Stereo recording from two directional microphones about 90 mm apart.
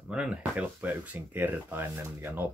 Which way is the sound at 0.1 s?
10° right (ahead or behind).